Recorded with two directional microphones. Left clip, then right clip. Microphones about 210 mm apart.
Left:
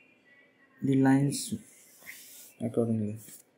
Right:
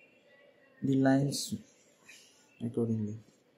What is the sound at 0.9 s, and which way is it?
Speech, 15° left (ahead or behind).